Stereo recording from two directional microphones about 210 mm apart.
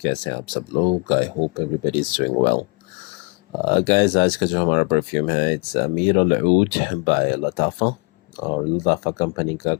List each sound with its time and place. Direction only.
0.0 s speech: 20° left (ahead or behind)
3.7 s speech: 25° left (ahead or behind)
6.1 s speech: 35° left (ahead or behind)
7.1 s speech: 25° left (ahead or behind)